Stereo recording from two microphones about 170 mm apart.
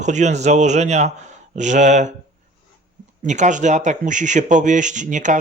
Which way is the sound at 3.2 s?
45° right (ahead or behind).